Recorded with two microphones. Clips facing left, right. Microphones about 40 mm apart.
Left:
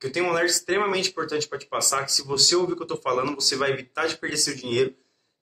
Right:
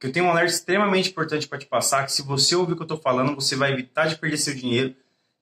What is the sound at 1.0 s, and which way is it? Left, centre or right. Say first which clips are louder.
Speech: right 1 dB; right.